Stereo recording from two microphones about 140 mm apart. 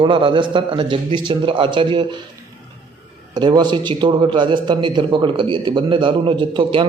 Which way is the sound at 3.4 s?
30° right (ahead or behind).